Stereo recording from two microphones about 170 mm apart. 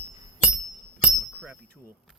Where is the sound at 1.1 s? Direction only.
5° right (ahead or behind).